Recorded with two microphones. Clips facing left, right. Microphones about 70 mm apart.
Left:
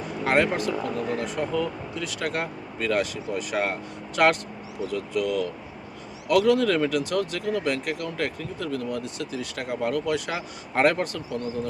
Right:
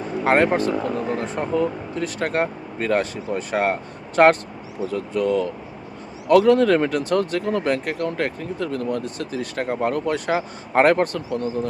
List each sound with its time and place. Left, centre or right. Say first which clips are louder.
0.3 s speech: right 5 dB; right